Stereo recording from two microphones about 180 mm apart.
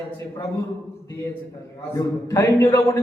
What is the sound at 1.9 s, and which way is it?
A man's voice, 15° left (ahead or behind).